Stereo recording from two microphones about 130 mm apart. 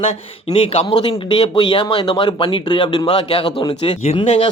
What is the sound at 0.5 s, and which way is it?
Speech, 45° left (ahead or behind).